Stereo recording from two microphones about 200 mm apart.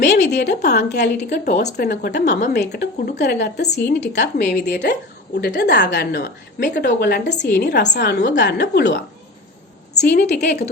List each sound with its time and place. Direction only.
0.0 s a woman's voice: 55° left (ahead or behind)
1.2 s speech: 35° left (ahead or behind)
1.5 s a woman's voice: 55° left (ahead or behind)
10.0 s a woman's voice: 55° left (ahead or behind)